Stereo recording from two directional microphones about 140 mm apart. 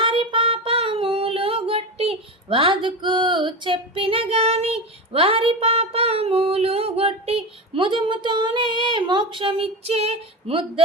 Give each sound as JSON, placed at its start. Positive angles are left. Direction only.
{"t": 0.0, "sound": "child singing", "side_deg": -35}